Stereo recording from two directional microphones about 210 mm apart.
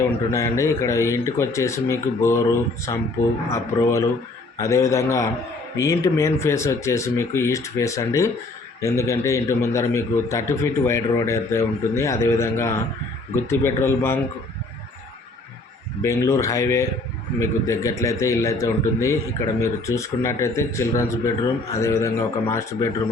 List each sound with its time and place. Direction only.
0.0 s a man's voice: 15° left (ahead or behind)
16.0 s a man's voice: 15° left (ahead or behind)